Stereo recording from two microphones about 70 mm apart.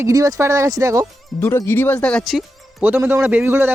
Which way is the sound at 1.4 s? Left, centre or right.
Left.